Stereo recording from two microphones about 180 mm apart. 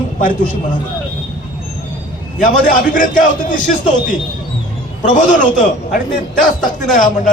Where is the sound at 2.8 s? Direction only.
45° left (ahead or behind).